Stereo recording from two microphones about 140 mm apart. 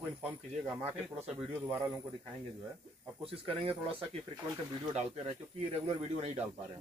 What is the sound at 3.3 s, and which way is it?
Speech, 45° right (ahead or behind).